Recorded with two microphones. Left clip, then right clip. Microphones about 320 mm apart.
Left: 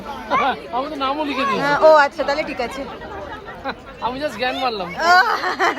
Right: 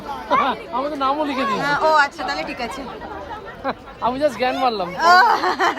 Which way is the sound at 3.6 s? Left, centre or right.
Right.